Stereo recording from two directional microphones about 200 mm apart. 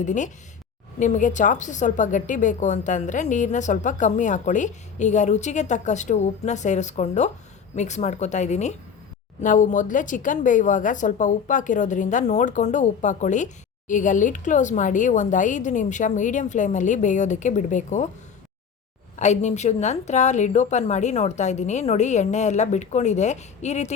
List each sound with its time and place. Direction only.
0.0 s a woman's voice: 40° left (ahead or behind)
19.1 s a woman's voice: 35° left (ahead or behind)